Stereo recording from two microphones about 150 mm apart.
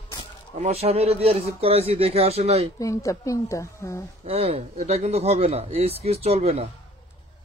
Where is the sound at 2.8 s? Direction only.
20° left (ahead or behind).